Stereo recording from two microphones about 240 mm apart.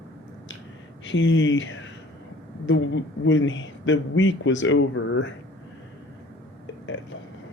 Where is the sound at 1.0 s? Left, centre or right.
Left.